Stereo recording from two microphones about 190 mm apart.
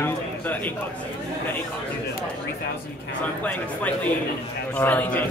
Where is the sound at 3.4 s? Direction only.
5° left (ahead or behind).